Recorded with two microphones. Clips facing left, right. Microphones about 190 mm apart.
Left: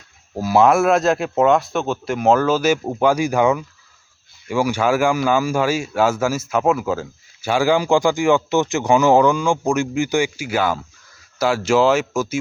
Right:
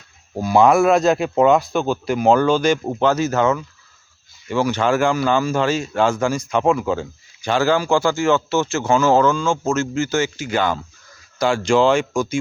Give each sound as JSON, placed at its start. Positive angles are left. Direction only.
{"t": 0.3, "sound": "speech", "side_deg": 5}